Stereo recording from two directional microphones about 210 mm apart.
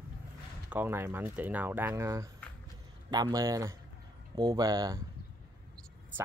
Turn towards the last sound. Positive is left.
turn(degrees=-20)  # may be behind; listen again after turning